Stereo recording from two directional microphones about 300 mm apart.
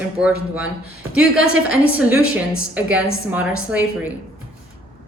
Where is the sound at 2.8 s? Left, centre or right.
Centre.